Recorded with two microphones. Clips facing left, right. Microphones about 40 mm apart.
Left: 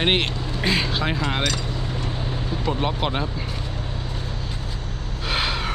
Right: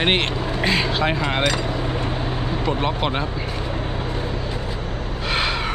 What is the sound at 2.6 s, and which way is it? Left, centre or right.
Speech, centre.